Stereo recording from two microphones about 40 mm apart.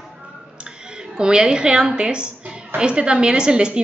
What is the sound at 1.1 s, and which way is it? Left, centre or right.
A woman's voice, right.